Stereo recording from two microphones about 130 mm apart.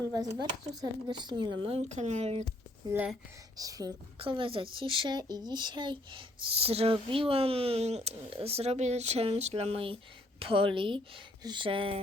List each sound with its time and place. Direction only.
0.1 s speech: 30° right (ahead or behind)
1.9 s speech: 60° right (ahead or behind)
3.6 s speech: 30° right (ahead or behind)
4.2 s speech: 45° right (ahead or behind)